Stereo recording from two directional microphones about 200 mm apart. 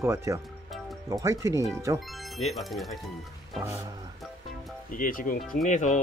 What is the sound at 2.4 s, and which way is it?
Speech, centre (ahead or behind).